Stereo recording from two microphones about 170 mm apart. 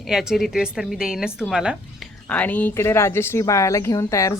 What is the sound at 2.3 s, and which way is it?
Speech, 10° left (ahead or behind).